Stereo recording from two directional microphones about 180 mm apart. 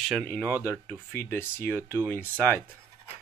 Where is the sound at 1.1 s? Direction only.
10° left (ahead or behind).